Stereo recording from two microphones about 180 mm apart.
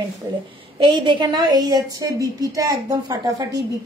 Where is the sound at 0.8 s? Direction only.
25° right (ahead or behind).